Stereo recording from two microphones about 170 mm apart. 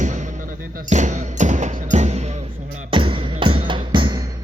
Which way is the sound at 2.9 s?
30° right (ahead or behind).